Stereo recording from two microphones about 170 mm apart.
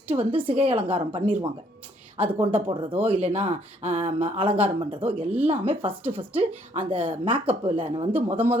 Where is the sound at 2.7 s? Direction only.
30° right (ahead or behind).